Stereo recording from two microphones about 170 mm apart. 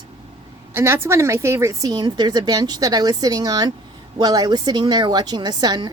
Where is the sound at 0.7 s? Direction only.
15° right (ahead or behind).